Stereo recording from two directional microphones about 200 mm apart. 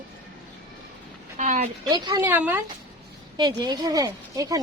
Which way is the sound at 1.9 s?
15° right (ahead or behind).